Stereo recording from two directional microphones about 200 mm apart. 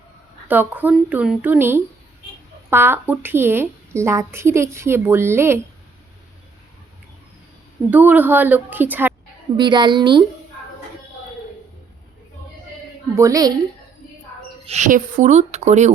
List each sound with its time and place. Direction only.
0.4 s a woman's voice: 10° right (ahead or behind)
7.9 s a woman's voice: 10° right (ahead or behind)
9.6 s a woman's voice: 20° right (ahead or behind)
13.1 s a woman's voice: 15° right (ahead or behind)
14.7 s speech: 40° right (ahead or behind)